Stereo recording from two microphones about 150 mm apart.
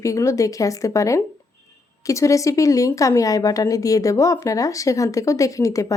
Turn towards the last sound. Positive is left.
turn(degrees=20)  # may be behind; listen again after turning